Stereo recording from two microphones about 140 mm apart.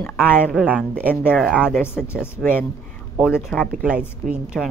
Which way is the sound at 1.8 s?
15° left (ahead or behind).